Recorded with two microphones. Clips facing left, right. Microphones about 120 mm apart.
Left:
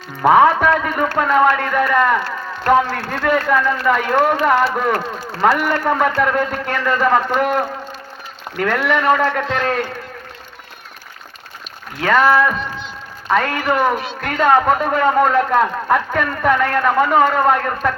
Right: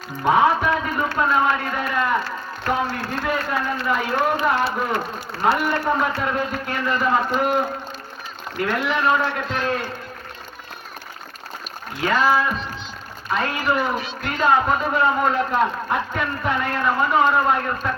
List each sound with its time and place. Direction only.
0.2 s a man's voice: 65° left (ahead or behind)
8.6 s a man's voice: 65° left (ahead or behind)
12.0 s speech: 70° left (ahead or behind); by 12.5 s 90° left
13.2 s a man's voice: 65° left (ahead or behind)